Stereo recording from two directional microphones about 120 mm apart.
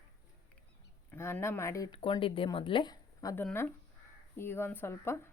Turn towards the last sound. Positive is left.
turn(degrees=20)  # may be behind; listen again after turning